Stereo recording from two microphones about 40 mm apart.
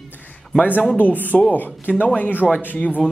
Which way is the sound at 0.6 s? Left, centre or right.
Left.